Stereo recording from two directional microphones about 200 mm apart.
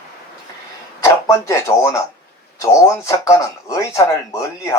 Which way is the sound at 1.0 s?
15° left (ahead or behind).